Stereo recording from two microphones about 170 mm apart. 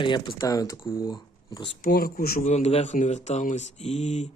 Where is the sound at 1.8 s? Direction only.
60° left (ahead or behind).